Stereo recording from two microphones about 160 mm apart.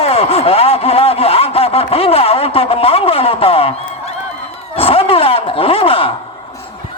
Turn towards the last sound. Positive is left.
turn(degrees=35)  # may be behind; listen again after turning